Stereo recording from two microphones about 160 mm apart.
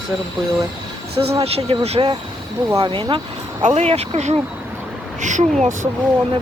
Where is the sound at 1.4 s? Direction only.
40° right (ahead or behind).